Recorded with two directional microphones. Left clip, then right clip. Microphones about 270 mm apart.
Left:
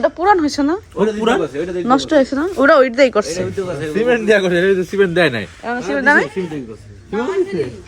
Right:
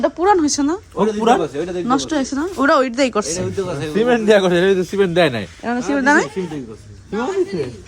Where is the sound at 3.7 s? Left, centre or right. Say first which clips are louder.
Left 1 dB; right.